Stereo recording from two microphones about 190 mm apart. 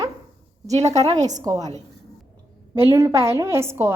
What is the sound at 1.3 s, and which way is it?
Speech, 20° right (ahead or behind).